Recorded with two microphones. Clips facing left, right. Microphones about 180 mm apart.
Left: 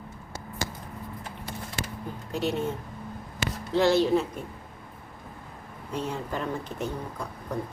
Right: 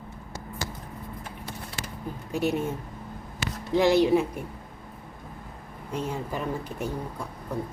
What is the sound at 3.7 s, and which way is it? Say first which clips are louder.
Speech: right 2 dB; 15° right (ahead or behind).